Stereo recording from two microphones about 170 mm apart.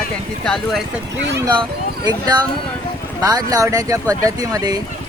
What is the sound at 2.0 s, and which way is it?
Speech, 25° right (ahead or behind).